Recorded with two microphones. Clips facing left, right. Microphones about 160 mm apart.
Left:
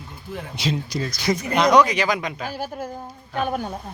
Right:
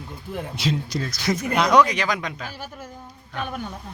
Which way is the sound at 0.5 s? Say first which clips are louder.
Left 1 dB; centre (ahead or behind).